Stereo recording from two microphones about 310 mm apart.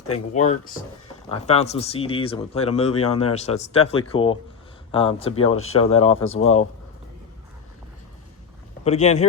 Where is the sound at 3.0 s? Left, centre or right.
Left.